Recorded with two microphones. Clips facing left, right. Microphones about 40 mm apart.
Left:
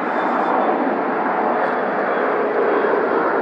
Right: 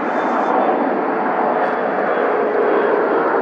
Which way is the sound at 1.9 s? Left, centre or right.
Centre.